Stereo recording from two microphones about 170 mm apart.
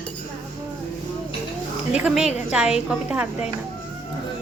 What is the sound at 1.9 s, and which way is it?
A woman's voice, 5° right (ahead or behind).